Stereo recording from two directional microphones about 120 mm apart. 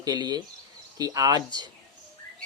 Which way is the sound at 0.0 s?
35° right (ahead or behind).